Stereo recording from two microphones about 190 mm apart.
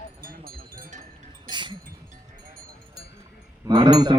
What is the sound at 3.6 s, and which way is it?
Speech, 20° right (ahead or behind).